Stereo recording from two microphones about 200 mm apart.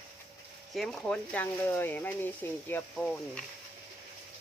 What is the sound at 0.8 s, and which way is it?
Speech, 5° left (ahead or behind).